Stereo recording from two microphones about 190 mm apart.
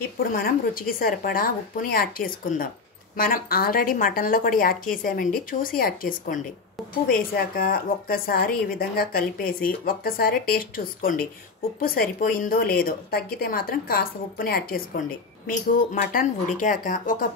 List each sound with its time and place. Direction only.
0.2 s a woman's voice: 50° left (ahead or behind)